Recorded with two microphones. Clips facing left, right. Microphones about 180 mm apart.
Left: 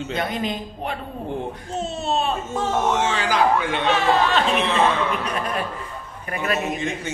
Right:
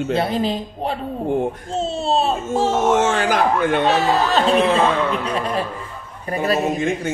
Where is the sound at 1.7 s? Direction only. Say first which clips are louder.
Even; 30° right (ahead or behind).